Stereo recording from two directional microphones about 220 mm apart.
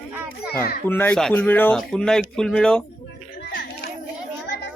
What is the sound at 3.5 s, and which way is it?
Children playing, 45° left (ahead or behind).